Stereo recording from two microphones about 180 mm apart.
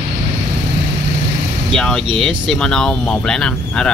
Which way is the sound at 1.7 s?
5° left (ahead or behind).